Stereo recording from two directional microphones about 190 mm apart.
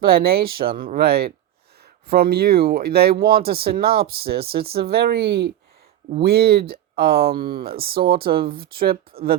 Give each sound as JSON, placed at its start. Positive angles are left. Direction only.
{"t": 0.0, "sound": "speech", "side_deg": -55}